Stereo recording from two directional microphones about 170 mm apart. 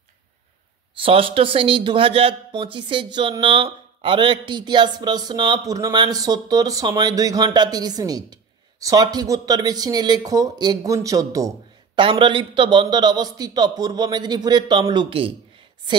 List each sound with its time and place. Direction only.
0.9 s a man's voice: 30° right (ahead or behind)